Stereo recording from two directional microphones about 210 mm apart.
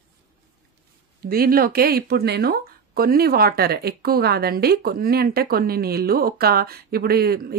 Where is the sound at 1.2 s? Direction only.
45° right (ahead or behind).